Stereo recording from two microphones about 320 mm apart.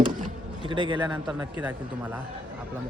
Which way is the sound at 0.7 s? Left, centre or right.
Centre.